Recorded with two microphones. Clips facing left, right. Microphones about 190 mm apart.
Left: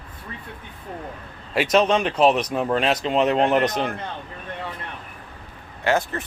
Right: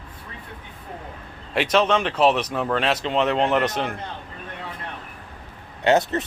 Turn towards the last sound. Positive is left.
turn(degrees=-20)  # may be behind; listen again after turning